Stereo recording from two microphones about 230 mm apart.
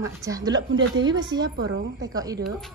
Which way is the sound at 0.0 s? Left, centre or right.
Centre.